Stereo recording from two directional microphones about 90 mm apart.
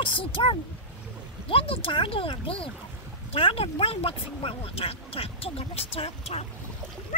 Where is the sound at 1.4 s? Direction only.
90° left.